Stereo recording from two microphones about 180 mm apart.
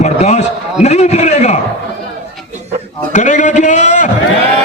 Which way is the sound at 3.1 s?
40° left (ahead or behind).